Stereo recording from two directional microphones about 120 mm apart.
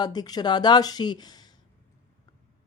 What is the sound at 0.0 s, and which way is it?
A woman's voice, 35° left (ahead or behind).